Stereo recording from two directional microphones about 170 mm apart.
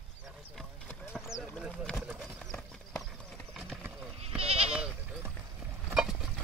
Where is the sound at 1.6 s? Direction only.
Centre (ahead or behind).